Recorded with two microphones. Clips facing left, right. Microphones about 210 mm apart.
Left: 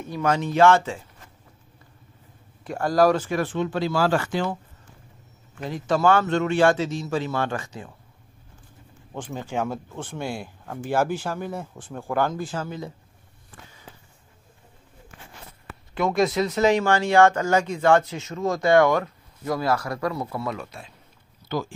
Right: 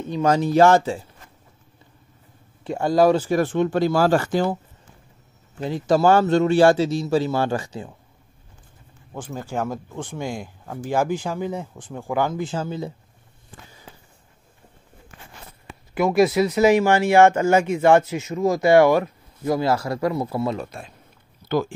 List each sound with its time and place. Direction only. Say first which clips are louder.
0.2 s speech: right 3 dB; 35° right (ahead or behind)
2.6 s speech: right 2 dB; 25° right (ahead or behind); by 4.5 s 40° right (ahead or behind)
5.6 s speech: right 4 dB; 30° right (ahead or behind)
9.1 s speech: right 1 dB; 5° right (ahead or behind)
12.4 s speech: right 4 dB; 25° right (ahead or behind)
16.0 s speech: right 4 dB; 5° right (ahead or behind)
16.7 s speech: right 3 dB; 20° right (ahead or behind)
18.4 s speech: right 3 dB; 5° right (ahead or behind)
19.4 s speech: right 3 dB; 25° right (ahead or behind)
20.6 s a man's voice: right 4 dB; 50° right (ahead or behind)
21.5 s speech: right 6 dB; 60° right (ahead or behind)